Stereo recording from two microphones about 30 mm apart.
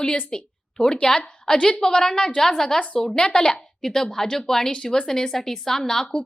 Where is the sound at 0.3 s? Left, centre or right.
Left.